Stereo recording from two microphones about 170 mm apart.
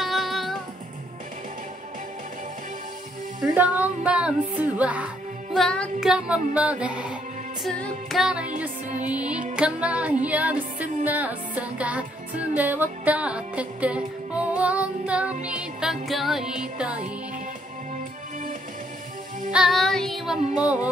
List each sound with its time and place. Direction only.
0.0 s music: centre (ahead or behind)
3.5 s music: 10° right (ahead or behind)
19.5 s music: centre (ahead or behind)